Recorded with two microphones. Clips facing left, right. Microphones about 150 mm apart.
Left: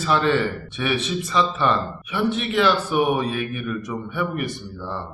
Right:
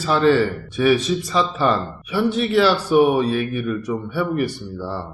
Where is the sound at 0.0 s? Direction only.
35° right (ahead or behind).